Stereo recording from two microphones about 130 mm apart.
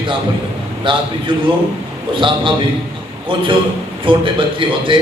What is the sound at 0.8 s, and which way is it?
A man's voice, 40° right (ahead or behind).